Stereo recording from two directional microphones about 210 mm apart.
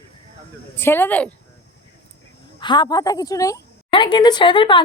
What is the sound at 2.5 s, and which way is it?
Speech, 20° left (ahead or behind).